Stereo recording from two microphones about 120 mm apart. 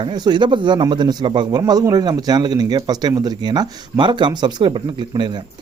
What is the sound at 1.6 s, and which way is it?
Speech, 30° right (ahead or behind).